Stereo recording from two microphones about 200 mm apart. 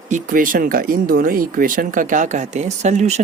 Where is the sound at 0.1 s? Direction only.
45° right (ahead or behind).